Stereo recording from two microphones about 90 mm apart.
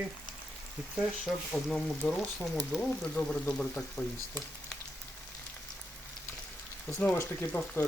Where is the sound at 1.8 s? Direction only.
15° left (ahead or behind).